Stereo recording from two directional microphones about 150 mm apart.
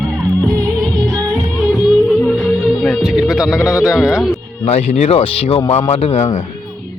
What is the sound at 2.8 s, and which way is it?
Music, 5° right (ahead or behind).